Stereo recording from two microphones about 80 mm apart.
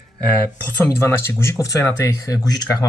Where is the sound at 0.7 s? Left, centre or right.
Left.